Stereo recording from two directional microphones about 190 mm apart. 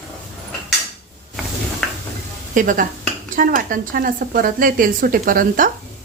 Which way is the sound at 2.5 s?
45° right (ahead or behind).